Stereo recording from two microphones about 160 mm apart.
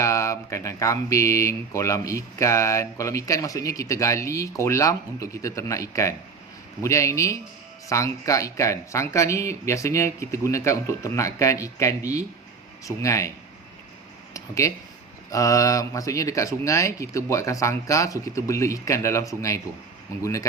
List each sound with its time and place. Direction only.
0.0 s speech: 20° left (ahead or behind)
14.3 s speech: 20° left (ahead or behind)